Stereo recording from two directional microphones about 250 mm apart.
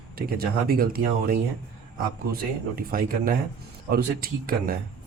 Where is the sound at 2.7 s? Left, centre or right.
Right.